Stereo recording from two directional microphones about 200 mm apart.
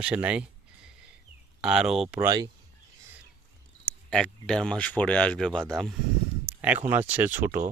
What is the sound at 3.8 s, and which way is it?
Speech, 5° left (ahead or behind).